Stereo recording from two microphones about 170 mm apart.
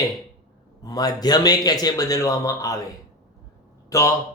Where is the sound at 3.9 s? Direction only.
20° left (ahead or behind).